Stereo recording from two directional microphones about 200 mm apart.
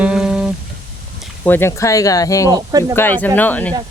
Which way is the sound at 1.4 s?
10° left (ahead or behind).